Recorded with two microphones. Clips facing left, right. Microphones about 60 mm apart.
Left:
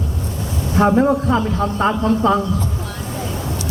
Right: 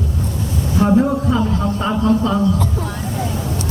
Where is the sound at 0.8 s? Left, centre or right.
Left.